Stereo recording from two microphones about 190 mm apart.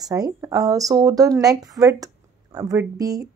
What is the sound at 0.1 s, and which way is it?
Speech, 15° right (ahead or behind).